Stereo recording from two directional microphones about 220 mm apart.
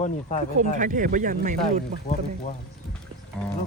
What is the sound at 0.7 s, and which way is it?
Speech, 35° right (ahead or behind).